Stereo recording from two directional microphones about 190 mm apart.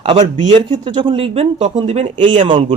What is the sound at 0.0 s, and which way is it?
Speech, 30° right (ahead or behind).